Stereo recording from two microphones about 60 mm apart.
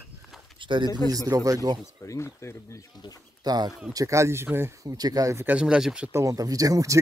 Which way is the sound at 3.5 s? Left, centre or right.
Right.